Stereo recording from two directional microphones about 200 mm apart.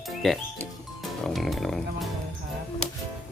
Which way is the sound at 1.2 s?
Centre (ahead or behind).